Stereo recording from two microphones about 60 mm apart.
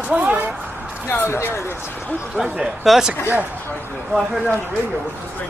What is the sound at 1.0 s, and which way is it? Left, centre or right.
Speech, left.